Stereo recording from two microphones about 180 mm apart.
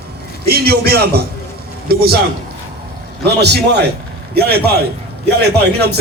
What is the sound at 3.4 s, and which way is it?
Speech, 65° right (ahead or behind).